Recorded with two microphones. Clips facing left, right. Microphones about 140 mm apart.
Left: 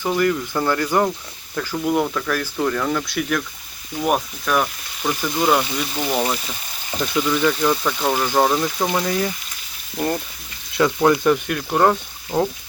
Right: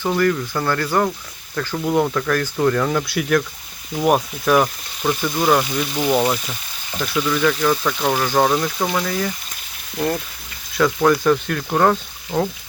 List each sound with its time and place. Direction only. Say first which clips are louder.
0.0 s speech: right 1 dB; 10° left (ahead or behind)
1.7 s speech: right 2 dB; centre (ahead or behind)
7.2 s speech: even; 10° left (ahead or behind)
8.9 s speech: left 1 dB; 20° left (ahead or behind)
10.8 s speech: even; 20° left (ahead or behind)